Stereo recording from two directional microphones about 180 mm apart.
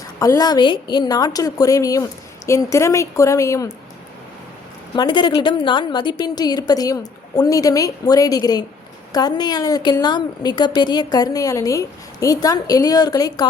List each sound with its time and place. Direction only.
0.2 s a woman's voice: 20° left (ahead or behind)
4.9 s a woman's voice: 25° left (ahead or behind)